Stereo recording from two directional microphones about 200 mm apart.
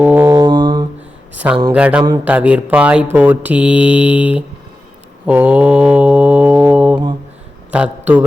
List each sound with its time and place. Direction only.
0.0 s mantra: 10° right (ahead or behind)
1.7 s mantra: 5° right (ahead or behind)
2.2 s speech: 5° right (ahead or behind)
5.2 s mantra: 5° right (ahead or behind)
7.7 s a man's voice: 5° right (ahead or behind)